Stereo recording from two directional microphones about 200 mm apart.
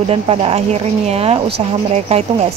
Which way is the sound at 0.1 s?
30° right (ahead or behind).